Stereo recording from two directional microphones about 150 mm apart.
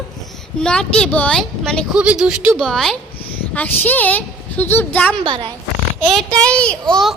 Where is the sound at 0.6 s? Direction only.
5° left (ahead or behind).